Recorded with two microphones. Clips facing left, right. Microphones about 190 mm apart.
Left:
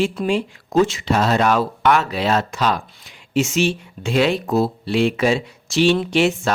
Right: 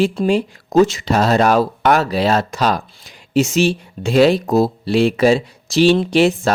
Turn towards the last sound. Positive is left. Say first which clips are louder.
# right 4 dB
turn(degrees=-35)  # may be behind; listen again after turning